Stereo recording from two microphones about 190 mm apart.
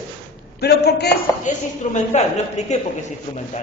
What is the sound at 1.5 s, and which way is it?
A woman's voice, 40° left (ahead or behind).